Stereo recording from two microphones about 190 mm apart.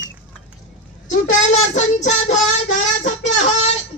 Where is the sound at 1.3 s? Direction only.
40° left (ahead or behind).